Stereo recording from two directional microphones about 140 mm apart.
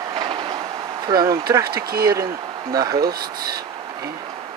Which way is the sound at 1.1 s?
30° right (ahead or behind).